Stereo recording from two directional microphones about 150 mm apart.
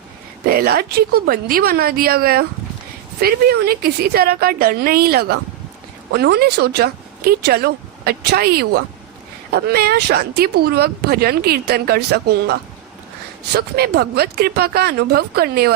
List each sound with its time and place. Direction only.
0.4 s speech: 90° right